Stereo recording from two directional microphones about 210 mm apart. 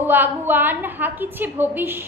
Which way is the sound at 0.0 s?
10° right (ahead or behind).